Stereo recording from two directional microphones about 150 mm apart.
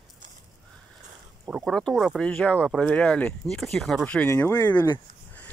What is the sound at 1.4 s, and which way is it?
Speech, 5° right (ahead or behind).